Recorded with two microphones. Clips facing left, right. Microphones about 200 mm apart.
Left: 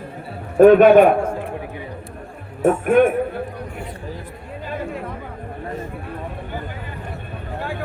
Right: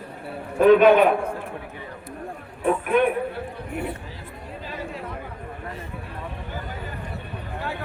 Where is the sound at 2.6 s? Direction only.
45° left (ahead or behind).